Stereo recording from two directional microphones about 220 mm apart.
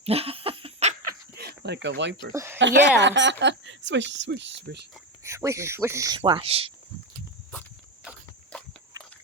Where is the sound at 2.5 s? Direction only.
55° right (ahead or behind).